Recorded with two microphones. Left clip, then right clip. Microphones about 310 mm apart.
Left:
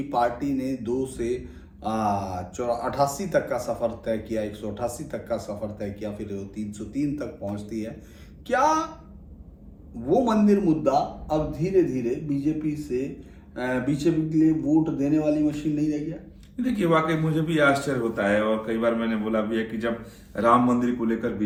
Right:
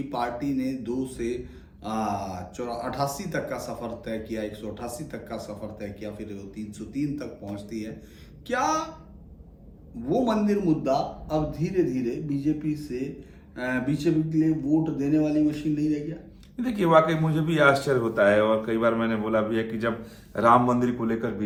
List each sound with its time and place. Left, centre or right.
0.1 s speech: centre
10.1 s speech: centre
16.6 s a man's voice: centre